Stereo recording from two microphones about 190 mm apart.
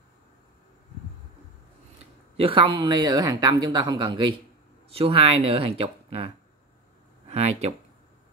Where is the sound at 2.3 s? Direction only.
30° right (ahead or behind).